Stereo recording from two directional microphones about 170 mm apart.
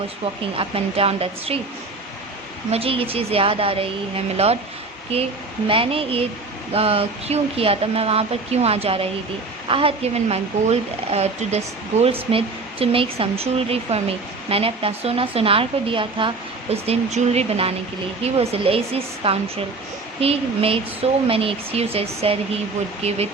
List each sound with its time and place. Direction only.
0.5 s speech: 30° right (ahead or behind)
2.6 s speech: 35° right (ahead or behind)
5.1 s speech: 35° right (ahead or behind)